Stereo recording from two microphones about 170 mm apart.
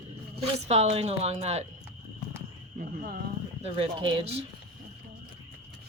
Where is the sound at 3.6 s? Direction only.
35° right (ahead or behind).